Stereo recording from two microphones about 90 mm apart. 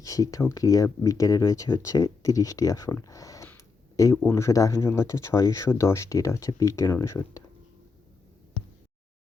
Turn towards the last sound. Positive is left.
turn(degrees=35)  # may be behind; listen again after turning